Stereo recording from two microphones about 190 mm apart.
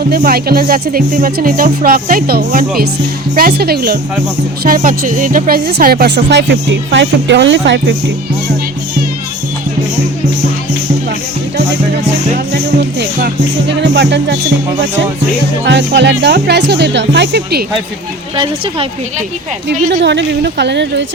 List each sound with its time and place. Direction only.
0.1 s speech: 50° right (ahead or behind)
13.0 s speech: 65° right (ahead or behind)
15.6 s speech: 65° right (ahead or behind)
18.3 s speech: 30° right (ahead or behind)
19.6 s speech: 65° right (ahead or behind)